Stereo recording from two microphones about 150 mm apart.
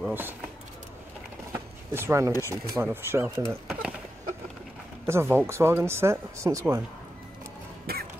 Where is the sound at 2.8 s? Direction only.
15° right (ahead or behind).